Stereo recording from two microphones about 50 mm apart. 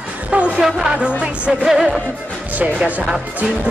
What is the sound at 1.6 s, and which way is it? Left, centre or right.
Music, centre.